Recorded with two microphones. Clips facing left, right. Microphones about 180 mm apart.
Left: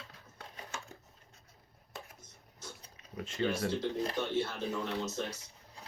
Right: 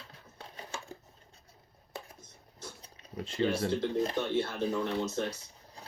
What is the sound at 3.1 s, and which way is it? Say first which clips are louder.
Speech: right 3 dB; 35° right (ahead or behind).